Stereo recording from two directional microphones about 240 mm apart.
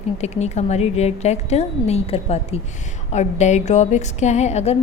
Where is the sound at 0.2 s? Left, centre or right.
Left.